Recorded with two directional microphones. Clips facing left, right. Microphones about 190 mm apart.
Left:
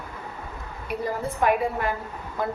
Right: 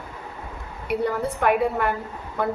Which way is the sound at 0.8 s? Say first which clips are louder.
Right 5 dB; 65° right (ahead or behind).